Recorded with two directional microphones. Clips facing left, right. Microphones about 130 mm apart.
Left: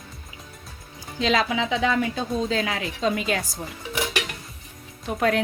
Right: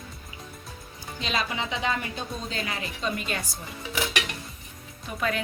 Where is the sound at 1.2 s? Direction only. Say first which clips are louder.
Left 8 dB; 90° left.